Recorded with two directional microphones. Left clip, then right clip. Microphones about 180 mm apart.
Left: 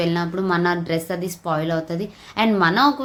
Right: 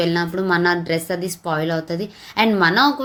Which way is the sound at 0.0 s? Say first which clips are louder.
Right 2 dB; 15° right (ahead or behind).